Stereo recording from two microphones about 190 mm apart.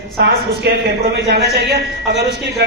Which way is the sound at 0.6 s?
60° right (ahead or behind).